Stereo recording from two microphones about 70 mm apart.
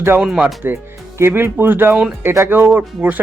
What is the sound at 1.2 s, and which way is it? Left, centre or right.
Speech, right.